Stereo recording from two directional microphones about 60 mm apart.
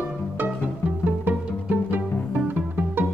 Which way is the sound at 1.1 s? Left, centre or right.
Right.